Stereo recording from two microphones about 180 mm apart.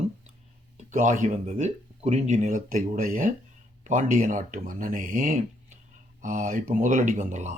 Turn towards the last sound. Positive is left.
turn(degrees=-45)  # may be behind; listen again after turning